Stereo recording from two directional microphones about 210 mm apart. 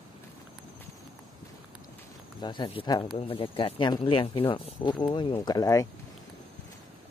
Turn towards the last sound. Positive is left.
turn(degrees=15)  # may be behind; listen again after turning